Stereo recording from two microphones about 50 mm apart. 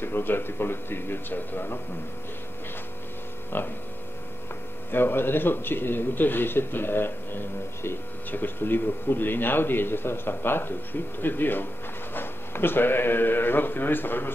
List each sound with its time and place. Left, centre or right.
0.0 s speech: left
3.5 s speech: left
4.9 s speech: left